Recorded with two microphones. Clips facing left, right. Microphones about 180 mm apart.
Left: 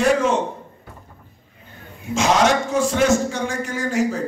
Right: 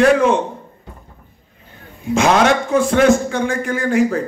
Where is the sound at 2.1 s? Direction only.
55° right (ahead or behind).